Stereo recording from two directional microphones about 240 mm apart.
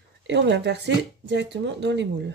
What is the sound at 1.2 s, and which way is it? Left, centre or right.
Speech, right.